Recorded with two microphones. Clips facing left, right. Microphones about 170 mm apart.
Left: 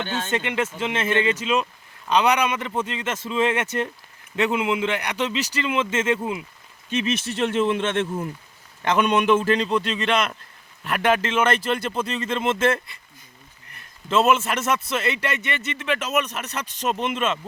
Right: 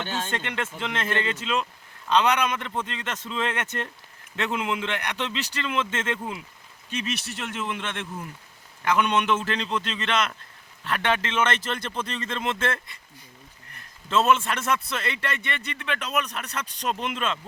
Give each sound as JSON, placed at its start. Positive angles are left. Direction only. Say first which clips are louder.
{"t": 0.3, "sound": "a man's voice", "louder": "left 6 dB", "side_deg": 5}
{"t": 6.9, "sound": "a man's voice", "louder": "left 7 dB", "side_deg": 25}
{"t": 10.8, "sound": "speech", "louder": "left 5 dB", "side_deg": 10}
{"t": 14.1, "sound": "speech", "louder": "left 2 dB", "side_deg": 5}